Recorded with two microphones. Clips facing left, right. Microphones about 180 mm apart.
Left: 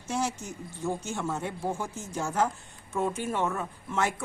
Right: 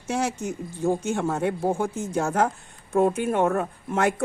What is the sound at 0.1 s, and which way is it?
Speech, 70° right (ahead or behind).